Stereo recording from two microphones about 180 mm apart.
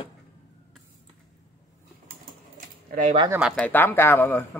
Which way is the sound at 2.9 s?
40° right (ahead or behind).